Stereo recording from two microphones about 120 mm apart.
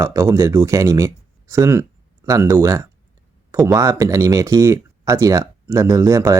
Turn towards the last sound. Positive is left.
turn(degrees=-25)  # may be behind; listen again after turning